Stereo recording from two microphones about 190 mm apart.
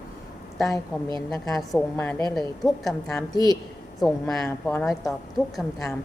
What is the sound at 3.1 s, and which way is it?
Speech, 20° left (ahead or behind).